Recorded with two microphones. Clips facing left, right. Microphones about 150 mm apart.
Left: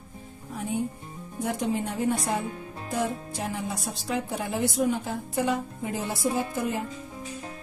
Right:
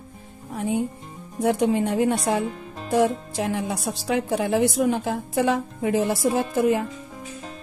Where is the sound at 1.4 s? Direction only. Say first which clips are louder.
Right 7 dB; 75° right (ahead or behind).